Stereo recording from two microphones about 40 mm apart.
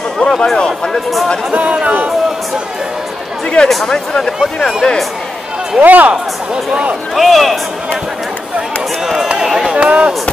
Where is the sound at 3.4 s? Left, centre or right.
Left.